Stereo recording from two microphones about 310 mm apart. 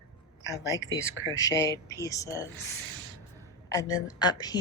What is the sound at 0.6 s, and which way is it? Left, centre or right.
Speech, left.